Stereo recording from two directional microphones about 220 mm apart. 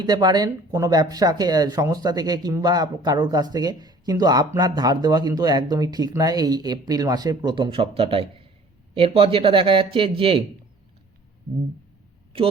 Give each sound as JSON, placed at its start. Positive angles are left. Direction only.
{"t": 0.0, "sound": "speech", "side_deg": -20}
{"t": 12.3, "sound": "speech", "side_deg": -25}